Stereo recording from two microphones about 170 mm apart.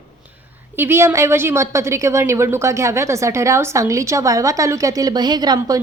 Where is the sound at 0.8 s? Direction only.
15° right (ahead or behind).